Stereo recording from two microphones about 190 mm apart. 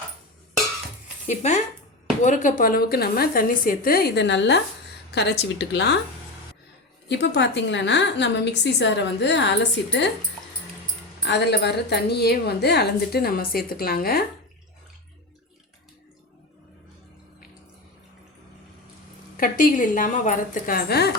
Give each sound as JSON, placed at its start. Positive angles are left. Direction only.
{"t": 1.3, "sound": "a woman's voice", "side_deg": 40}
{"t": 7.1, "sound": "a woman's voice", "side_deg": 65}
{"t": 11.2, "sound": "a woman's voice", "side_deg": 65}
{"t": 19.4, "sound": "a woman's voice", "side_deg": 45}